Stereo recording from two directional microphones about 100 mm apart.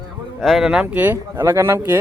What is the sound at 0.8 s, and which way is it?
Speech, 20° right (ahead or behind).